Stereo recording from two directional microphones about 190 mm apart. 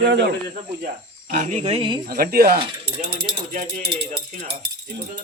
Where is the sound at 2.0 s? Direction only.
50° right (ahead or behind).